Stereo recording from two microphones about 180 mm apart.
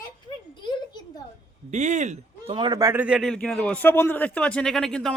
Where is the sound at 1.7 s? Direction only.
40° right (ahead or behind).